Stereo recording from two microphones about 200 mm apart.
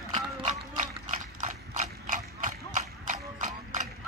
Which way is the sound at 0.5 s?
40° right (ahead or behind).